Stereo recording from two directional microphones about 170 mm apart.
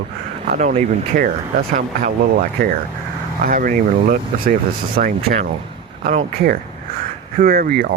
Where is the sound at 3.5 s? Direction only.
55° right (ahead or behind).